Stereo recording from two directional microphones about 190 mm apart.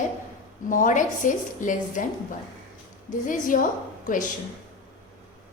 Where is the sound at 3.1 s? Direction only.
45° left (ahead or behind).